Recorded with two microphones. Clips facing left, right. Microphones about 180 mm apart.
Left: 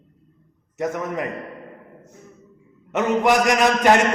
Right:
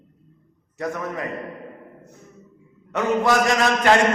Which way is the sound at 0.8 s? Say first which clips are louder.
Left 3 dB; 20° left (ahead or behind).